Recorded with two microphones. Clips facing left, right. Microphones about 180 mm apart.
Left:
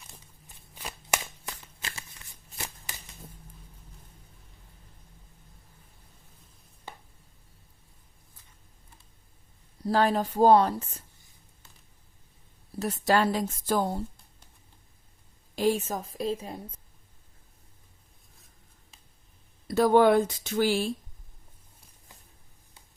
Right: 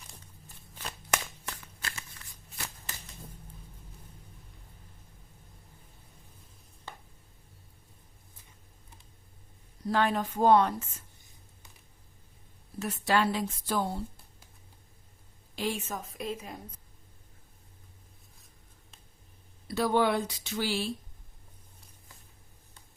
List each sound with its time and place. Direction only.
0.9 s shuffling cards: 10° left (ahead or behind)
1.6 s a sound: 25° left (ahead or behind)
9.8 s a woman's voice: 35° left (ahead or behind)
12.8 s speech: 40° left (ahead or behind)
15.5 s a woman's voice: 40° left (ahead or behind)
19.6 s speech: 45° left (ahead or behind)